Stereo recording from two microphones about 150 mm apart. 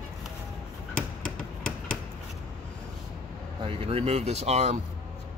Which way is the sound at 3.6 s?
40° right (ahead or behind).